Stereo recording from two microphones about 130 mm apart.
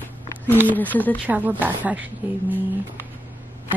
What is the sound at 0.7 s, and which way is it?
Speech, 15° left (ahead or behind).